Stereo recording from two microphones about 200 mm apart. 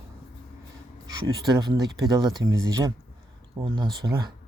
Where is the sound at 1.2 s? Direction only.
20° right (ahead or behind).